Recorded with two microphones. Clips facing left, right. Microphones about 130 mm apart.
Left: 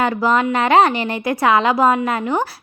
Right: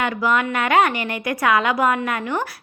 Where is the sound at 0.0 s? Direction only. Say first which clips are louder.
Left 4 dB; 30° left (ahead or behind).